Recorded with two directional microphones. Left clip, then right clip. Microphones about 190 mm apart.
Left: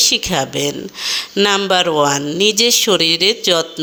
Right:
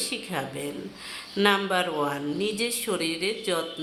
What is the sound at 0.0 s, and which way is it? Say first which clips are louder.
Speech: left 16 dB; 45° left (ahead or behind).